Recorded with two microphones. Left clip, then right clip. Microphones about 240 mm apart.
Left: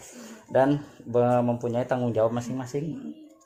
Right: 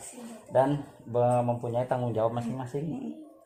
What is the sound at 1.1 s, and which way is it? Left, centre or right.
Speech, left.